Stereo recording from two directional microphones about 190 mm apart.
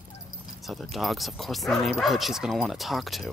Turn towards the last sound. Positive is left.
turn(degrees=0)  # may be behind; listen again after turning